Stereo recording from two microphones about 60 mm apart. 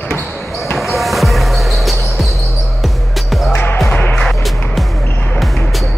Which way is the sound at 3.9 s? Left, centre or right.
Centre.